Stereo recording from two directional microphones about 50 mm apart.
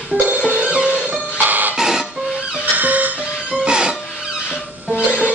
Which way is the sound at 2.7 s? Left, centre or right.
Right.